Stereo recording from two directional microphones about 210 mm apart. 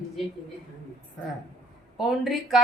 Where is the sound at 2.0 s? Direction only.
Centre (ahead or behind).